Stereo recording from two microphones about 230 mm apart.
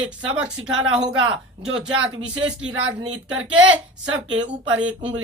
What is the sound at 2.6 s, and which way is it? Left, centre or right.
Speech, right.